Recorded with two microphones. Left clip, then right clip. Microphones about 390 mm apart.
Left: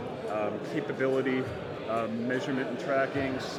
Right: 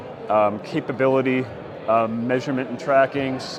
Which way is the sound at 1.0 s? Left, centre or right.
Right.